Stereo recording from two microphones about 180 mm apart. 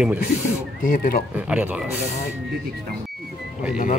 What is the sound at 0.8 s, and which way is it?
Speech, 50° left (ahead or behind).